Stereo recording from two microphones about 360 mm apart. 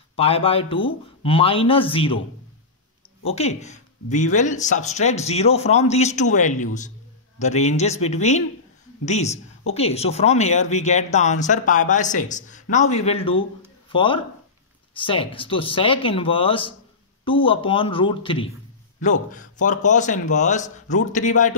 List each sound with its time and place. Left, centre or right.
0.1 s speech: centre
3.3 s speech: centre